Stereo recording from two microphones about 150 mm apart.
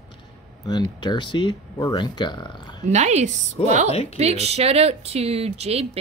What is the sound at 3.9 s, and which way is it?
Speech, 45° left (ahead or behind).